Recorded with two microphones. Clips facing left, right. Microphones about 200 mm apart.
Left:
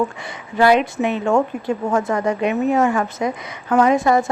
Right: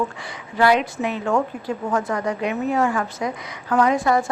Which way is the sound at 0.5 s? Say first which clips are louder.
Left 3 dB; 25° left (ahead or behind).